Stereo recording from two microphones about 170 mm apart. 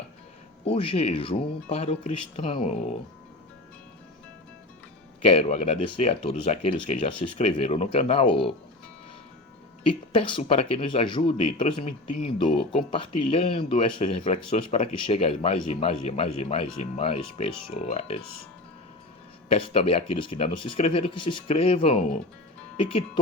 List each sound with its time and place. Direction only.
0.6 s speech: 35° left (ahead or behind)
5.2 s speech: 35° left (ahead or behind)
9.8 s speech: 30° left (ahead or behind)
19.5 s speech: 35° left (ahead or behind)